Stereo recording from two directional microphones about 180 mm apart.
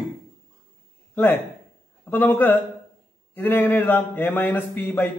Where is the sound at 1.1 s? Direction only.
10° left (ahead or behind).